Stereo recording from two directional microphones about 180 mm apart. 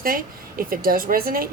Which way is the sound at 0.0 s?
55° right (ahead or behind).